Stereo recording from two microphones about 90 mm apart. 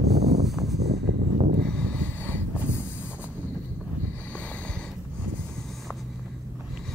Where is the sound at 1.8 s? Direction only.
20° left (ahead or behind).